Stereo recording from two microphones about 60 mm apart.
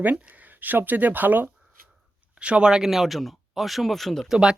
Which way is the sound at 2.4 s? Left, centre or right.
Centre.